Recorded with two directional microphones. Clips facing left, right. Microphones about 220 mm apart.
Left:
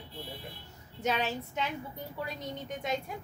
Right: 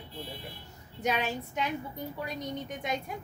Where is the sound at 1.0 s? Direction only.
15° right (ahead or behind).